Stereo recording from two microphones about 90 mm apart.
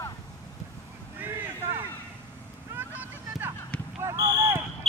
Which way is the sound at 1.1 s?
20° right (ahead or behind).